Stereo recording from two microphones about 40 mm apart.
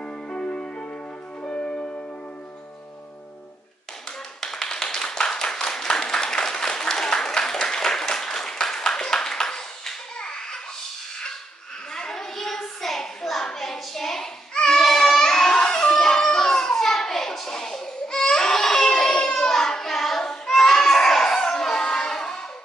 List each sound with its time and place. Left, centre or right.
0.3 s music: left
4.4 s clapping: centre
11.9 s a sound: centre
13.5 s hands: centre
14.5 s baby cry: left
14.8 s baby cry: centre